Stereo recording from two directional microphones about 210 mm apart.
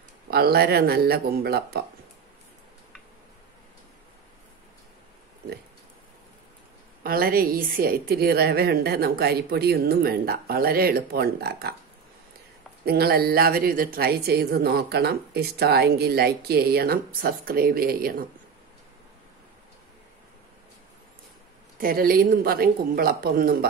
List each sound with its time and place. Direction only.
0.3 s a woman's voice: 50° right (ahead or behind)
7.0 s a woman's voice: 45° right (ahead or behind)
12.8 s a woman's voice: 50° right (ahead or behind)
21.7 s a woman's voice: 45° right (ahead or behind)